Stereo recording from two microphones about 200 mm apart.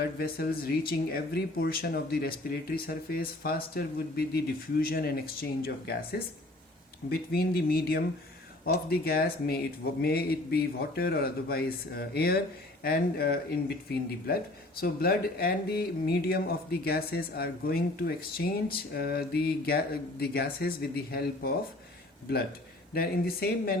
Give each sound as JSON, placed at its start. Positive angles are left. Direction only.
{"t": 0.0, "sound": "speech", "side_deg": 50}
{"t": 23.0, "sound": "speech", "side_deg": 50}